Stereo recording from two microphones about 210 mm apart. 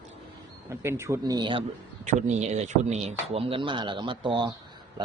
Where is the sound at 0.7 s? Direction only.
15° right (ahead or behind).